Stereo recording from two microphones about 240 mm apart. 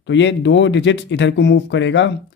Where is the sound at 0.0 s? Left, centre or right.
Left.